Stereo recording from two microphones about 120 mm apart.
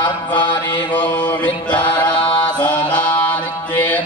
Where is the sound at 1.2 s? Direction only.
15° left (ahead or behind).